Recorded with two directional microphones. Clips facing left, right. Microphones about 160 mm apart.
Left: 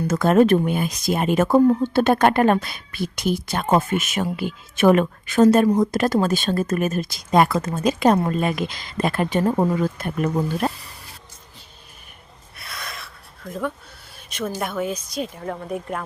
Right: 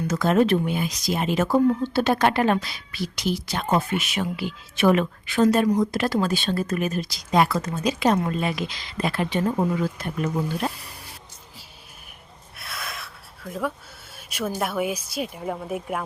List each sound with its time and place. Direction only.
0.1 s speech: 50° left (ahead or behind)
10.7 s speech: centre (ahead or behind)
12.5 s a sound: centre (ahead or behind)
14.3 s speech: 10° right (ahead or behind)